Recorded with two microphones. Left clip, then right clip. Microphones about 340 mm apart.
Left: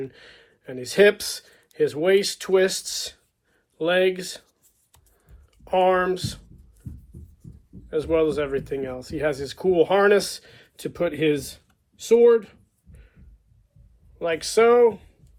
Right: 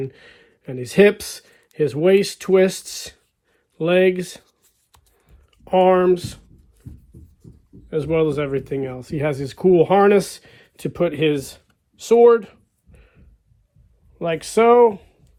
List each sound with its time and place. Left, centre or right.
0.1 s speech: right
5.5 s speech: right
7.9 s speech: right
11.7 s computer keyboard: centre
14.2 s speech: centre